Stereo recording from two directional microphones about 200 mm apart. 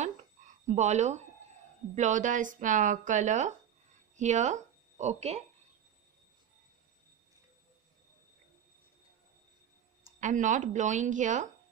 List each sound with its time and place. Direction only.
0.0 s a sound: 35° right (ahead or behind)
2.0 s speech: 40° right (ahead or behind)
10.2 s speech: 40° right (ahead or behind)